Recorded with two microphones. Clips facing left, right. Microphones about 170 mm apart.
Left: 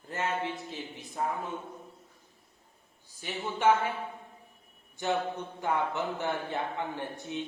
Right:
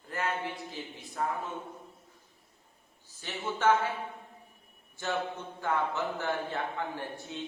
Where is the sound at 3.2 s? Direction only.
15° left (ahead or behind).